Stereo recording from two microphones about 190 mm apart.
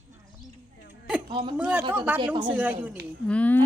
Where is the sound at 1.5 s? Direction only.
5° right (ahead or behind).